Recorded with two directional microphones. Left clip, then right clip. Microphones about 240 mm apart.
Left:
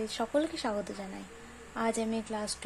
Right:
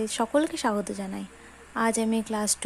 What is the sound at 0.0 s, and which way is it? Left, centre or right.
Speech, right.